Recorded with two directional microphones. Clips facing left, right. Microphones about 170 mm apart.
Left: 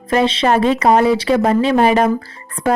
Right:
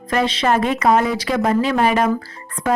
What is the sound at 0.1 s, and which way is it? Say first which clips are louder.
Speech: left 3 dB; 25° left (ahead or behind).